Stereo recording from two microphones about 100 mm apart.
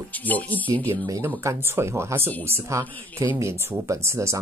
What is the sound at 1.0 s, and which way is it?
Speech, 35° right (ahead or behind).